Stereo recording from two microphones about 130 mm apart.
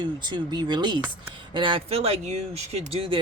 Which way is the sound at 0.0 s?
35° right (ahead or behind).